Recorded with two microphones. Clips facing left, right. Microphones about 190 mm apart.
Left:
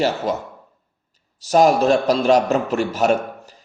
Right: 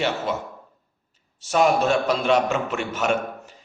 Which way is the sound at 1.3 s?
35° left (ahead or behind).